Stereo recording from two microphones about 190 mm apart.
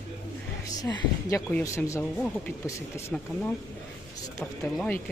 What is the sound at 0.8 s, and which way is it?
A woman's voice, 20° left (ahead or behind).